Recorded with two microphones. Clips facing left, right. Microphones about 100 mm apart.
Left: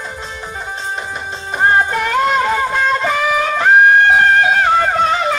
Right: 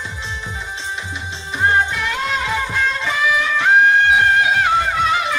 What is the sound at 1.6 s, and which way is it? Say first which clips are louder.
Music: left 4 dB; 45° left (ahead or behind).